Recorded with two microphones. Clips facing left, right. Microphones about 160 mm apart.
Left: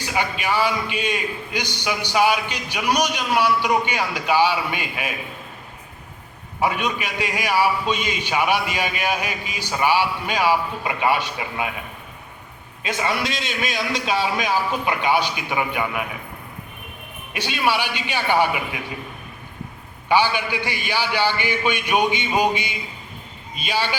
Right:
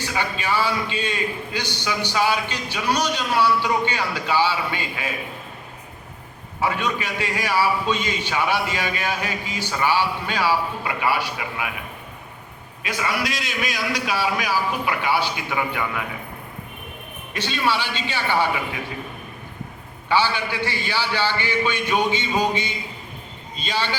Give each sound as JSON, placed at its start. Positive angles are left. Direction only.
{"t": 0.0, "sound": "a man's voice", "side_deg": 15}
{"t": 6.6, "sound": "a man's voice", "side_deg": 15}
{"t": 12.8, "sound": "a man's voice", "side_deg": 25}
{"t": 17.3, "sound": "a man's voice", "side_deg": 15}
{"t": 20.1, "sound": "a man's voice", "side_deg": 15}